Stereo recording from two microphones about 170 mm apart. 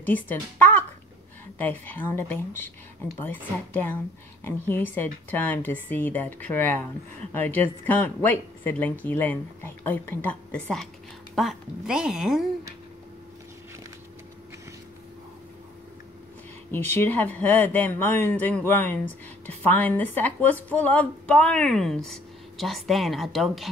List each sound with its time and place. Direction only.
0.0 s a woman's voice: 10° left (ahead or behind)
16.7 s speech: 10° left (ahead or behind)